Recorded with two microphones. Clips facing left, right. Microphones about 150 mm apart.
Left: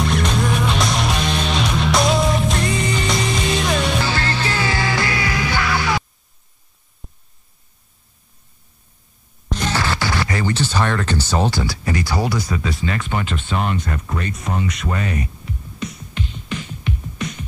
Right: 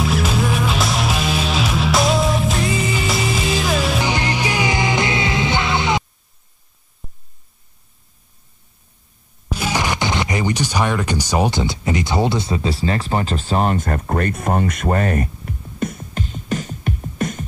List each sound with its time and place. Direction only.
0.0 s music: 5° right (ahead or behind)
4.0 s music: 15° right (ahead or behind)
7.0 s a sound: centre (ahead or behind)
9.5 s music: 10° right (ahead or behind); by 17.4 s 45° right (ahead or behind)